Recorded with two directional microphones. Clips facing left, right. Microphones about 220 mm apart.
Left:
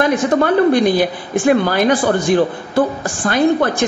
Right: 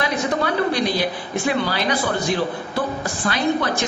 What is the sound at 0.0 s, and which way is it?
A woman's voice, 50° left (ahead or behind).